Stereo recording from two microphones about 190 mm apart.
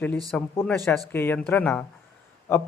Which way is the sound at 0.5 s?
10° left (ahead or behind).